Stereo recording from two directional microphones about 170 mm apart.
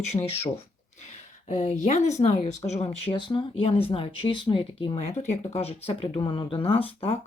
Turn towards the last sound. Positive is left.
turn(degrees=35)  # may be behind; listen again after turning